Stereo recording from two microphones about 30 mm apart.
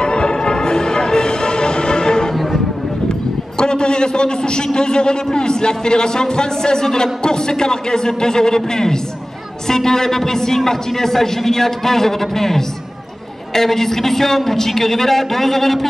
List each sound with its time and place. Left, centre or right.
0.0 s music: left
3.5 s a sound: left
4.7 s a man's voice: left; by 15.9 s centre